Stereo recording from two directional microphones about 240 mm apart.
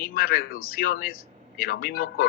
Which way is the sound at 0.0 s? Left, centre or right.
Left.